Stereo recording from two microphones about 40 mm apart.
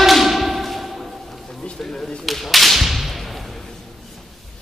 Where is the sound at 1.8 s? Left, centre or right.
Centre.